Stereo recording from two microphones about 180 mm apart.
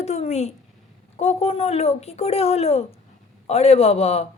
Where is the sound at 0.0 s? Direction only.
35° left (ahead or behind).